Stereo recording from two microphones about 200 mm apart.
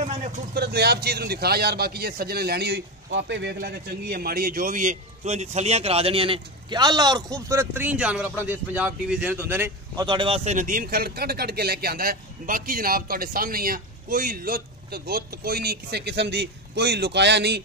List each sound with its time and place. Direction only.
0.6 s a man's voice: 55° right (ahead or behind)
3.5 s a man's voice: 45° right (ahead or behind); by 10.0 s 10° right (ahead or behind)
10.0 s a man's voice: 25° right (ahead or behind); by 17.6 s 60° right (ahead or behind)